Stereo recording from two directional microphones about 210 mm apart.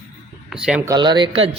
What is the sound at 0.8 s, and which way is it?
Speech, 20° right (ahead or behind).